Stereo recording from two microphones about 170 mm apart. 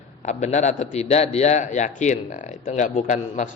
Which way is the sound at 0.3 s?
45° left (ahead or behind).